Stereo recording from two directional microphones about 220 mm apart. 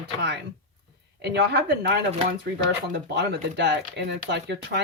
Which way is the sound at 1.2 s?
45° right (ahead or behind).